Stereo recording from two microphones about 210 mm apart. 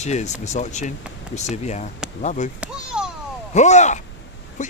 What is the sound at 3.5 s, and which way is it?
Speech, 35° left (ahead or behind).